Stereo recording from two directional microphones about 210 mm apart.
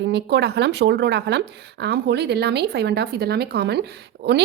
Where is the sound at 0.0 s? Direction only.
55° right (ahead or behind).